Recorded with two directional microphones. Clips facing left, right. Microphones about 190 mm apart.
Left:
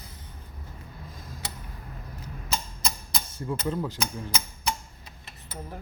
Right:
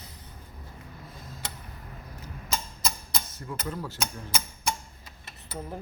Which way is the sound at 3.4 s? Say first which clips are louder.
Left 9 dB; 25° left (ahead or behind).